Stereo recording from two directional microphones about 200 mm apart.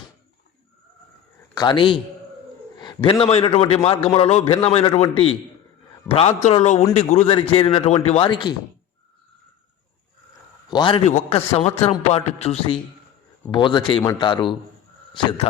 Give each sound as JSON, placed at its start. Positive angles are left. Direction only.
{"t": 1.5, "sound": "a man's voice", "side_deg": 25}
{"t": 10.7, "sound": "a man's voice", "side_deg": 25}